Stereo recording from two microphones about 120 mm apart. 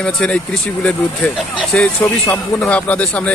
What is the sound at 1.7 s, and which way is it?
Speech, 10° left (ahead or behind).